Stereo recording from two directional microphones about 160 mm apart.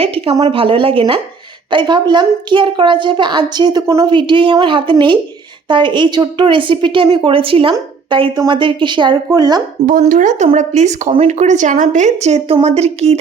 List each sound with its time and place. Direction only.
0.0 s a woman's voice: 35° right (ahead or behind)
10.0 s a woman's voice: 50° right (ahead or behind)